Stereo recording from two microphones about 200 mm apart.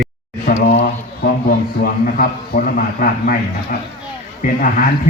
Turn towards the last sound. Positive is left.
turn(degrees=45)  # may be behind; listen again after turning